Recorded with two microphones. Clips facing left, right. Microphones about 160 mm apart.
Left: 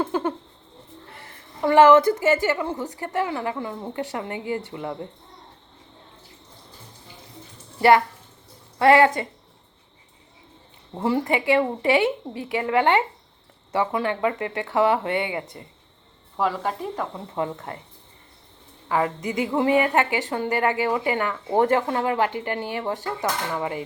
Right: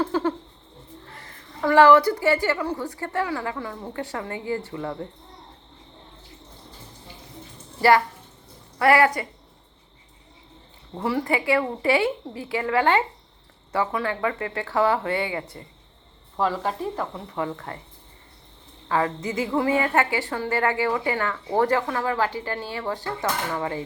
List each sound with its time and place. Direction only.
0.0 s a sound: 20° left (ahead or behind)
1.6 s a woman's voice: 20° left (ahead or behind)
7.8 s a child's voice: 20° left (ahead or behind)
10.9 s a woman's voice: 25° left (ahead or behind)
17.2 s a woman's voice: 25° left (ahead or behind)
18.9 s a woman's voice: 15° left (ahead or behind)